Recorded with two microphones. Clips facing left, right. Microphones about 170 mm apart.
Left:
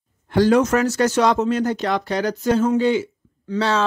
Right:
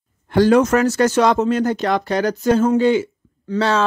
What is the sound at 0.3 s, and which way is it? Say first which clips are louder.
Speech: right 2 dB; 55° right (ahead or behind).